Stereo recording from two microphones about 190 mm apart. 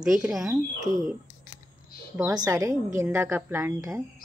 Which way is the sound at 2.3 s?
20° right (ahead or behind).